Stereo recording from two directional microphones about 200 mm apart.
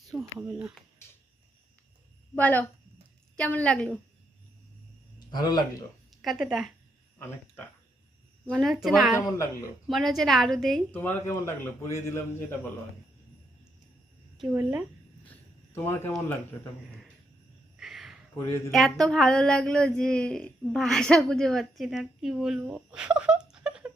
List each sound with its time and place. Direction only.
0.2 s speech: 10° right (ahead or behind)
2.3 s speech: 10° left (ahead or behind)
5.3 s speech: 20° left (ahead or behind)
6.2 s speech: centre (ahead or behind)
8.4 s speech: centre (ahead or behind)
14.5 s speech: 5° right (ahead or behind)
15.7 s speech: 10° left (ahead or behind)
17.7 s a sound: centre (ahead or behind)
18.7 s speech: centre (ahead or behind)